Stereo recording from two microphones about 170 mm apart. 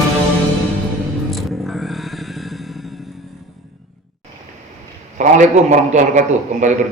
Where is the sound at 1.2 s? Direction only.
Centre (ahead or behind).